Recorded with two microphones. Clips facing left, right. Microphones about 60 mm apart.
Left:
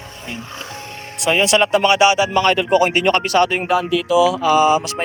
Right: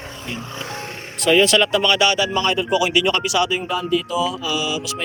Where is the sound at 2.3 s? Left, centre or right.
Left.